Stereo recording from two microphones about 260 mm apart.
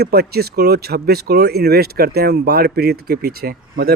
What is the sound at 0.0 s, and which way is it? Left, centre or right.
Speech, right.